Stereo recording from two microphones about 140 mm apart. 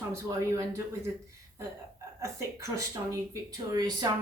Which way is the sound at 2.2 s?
20° right (ahead or behind).